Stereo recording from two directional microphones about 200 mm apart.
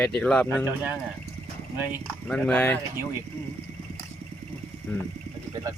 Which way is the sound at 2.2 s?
5° left (ahead or behind).